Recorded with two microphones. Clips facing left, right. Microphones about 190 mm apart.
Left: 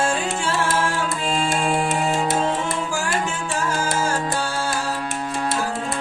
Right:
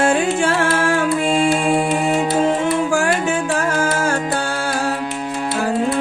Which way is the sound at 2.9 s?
60° right (ahead or behind).